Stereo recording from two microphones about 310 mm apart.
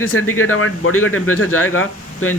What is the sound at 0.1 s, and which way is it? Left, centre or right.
Speech, left.